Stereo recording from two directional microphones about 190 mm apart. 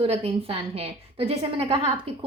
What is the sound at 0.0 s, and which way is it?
A woman's voice, 30° right (ahead or behind).